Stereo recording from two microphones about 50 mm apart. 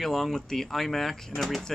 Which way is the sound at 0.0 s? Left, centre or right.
Centre.